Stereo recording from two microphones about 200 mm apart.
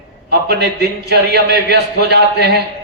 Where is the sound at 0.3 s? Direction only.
55° right (ahead or behind).